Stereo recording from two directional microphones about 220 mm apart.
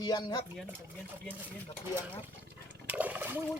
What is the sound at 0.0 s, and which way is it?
Speech, 20° left (ahead or behind).